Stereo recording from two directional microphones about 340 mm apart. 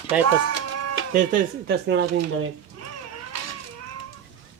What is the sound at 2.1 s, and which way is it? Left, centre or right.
Speech, right.